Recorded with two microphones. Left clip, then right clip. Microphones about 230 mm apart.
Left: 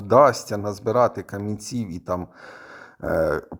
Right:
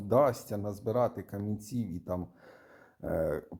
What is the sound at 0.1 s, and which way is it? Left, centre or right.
Speech, left.